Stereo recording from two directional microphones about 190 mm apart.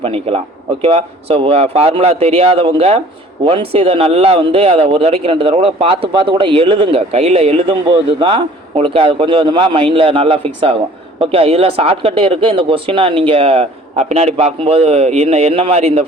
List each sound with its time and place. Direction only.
0.0 s speech: 30° right (ahead or behind)